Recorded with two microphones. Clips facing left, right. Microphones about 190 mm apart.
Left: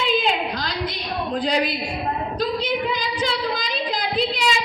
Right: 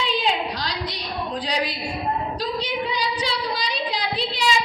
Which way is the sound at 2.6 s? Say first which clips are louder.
Left 2 dB; 50° left (ahead or behind).